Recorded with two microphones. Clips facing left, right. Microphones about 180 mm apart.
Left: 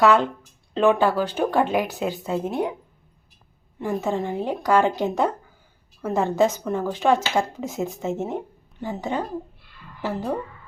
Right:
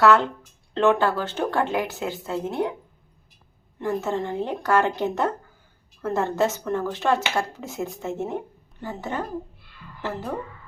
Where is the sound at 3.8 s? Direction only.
10° left (ahead or behind).